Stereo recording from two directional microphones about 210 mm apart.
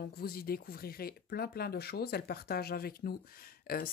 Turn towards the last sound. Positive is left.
turn(degrees=45)  # may be behind; listen again after turning